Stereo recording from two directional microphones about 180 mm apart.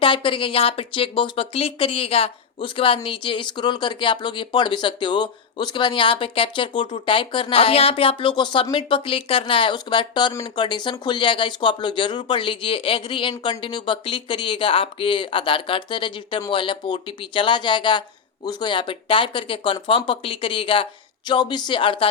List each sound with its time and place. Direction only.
0.0 s speech: 30° left (ahead or behind)